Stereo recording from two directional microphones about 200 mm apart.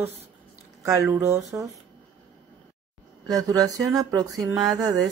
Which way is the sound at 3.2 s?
20° right (ahead or behind).